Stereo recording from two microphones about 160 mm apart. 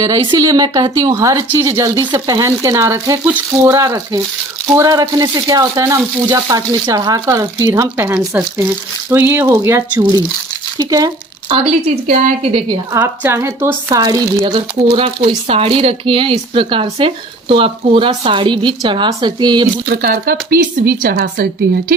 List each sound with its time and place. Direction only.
0.0 s speech: 20° right (ahead or behind)
12.0 s a woman's voice: 45° right (ahead or behind)
12.5 s speech: 25° right (ahead or behind)
13.0 s speech: 15° right (ahead or behind)
19.9 s speech: 65° right (ahead or behind)